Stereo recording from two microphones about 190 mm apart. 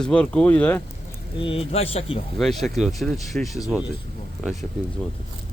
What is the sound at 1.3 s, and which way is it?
Speech, 30° left (ahead or behind).